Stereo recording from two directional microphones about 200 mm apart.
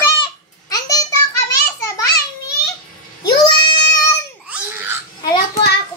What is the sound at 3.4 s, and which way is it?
Goat, 20° left (ahead or behind).